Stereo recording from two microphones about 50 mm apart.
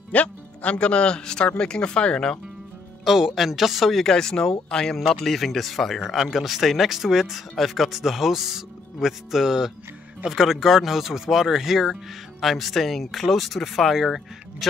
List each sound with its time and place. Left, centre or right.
0.1 s speech: left
3.1 s speech: centre
4.1 s speech: centre